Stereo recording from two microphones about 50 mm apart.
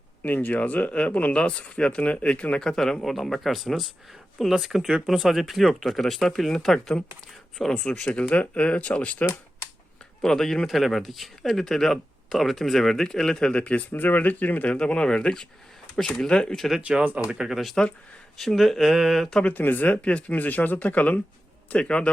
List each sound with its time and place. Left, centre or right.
0.2 s speech: left
2.6 s speech: centre
7.9 s speech: left
10.2 s speech: centre
13.9 s speech: left
14.8 s speech: centre
17.2 s speech: centre
19.4 s speech: left
21.7 s speech: left